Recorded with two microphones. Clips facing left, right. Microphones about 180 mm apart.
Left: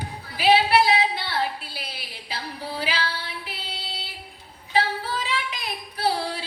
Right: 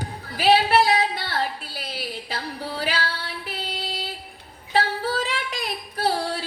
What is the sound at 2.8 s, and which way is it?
Female singing, 50° right (ahead or behind).